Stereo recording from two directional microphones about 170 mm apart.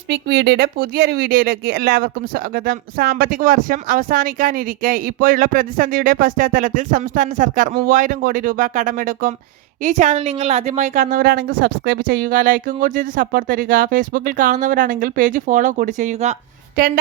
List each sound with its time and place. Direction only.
0.1 s a woman's voice: 85° right; by 16.4 s 40° right (ahead or behind)
16.7 s a woman's voice: 60° right (ahead or behind)